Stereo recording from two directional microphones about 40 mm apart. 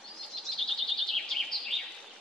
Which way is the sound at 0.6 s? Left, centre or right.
Centre.